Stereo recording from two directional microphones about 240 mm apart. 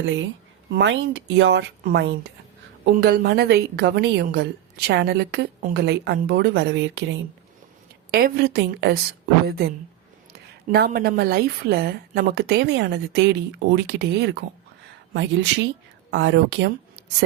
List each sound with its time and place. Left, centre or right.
0.0 s a woman's voice: right
8.1 s a woman's voice: right